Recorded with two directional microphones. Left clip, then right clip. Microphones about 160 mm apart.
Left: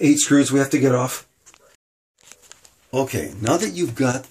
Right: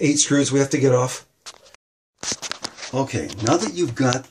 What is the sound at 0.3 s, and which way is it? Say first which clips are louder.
Speech: left 2 dB; 15° left (ahead or behind).